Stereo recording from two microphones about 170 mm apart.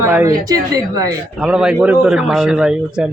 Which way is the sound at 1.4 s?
5° right (ahead or behind).